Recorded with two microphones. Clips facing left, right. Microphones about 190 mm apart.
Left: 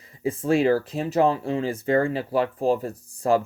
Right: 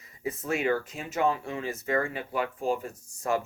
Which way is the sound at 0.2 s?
30° left (ahead or behind).